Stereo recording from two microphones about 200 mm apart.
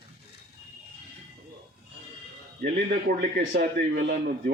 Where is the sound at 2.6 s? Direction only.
55° right (ahead or behind).